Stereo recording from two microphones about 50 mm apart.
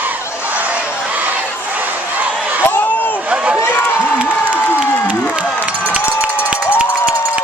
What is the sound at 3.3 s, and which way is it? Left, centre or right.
Run, right.